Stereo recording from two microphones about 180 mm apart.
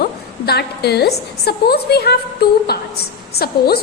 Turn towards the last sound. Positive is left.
turn(degrees=60)  # may be behind; listen again after turning